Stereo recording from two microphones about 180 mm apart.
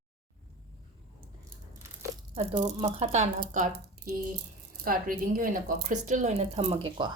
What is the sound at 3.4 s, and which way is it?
Speech, 45° right (ahead or behind).